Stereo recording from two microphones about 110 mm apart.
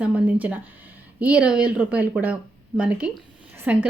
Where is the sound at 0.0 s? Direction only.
15° right (ahead or behind).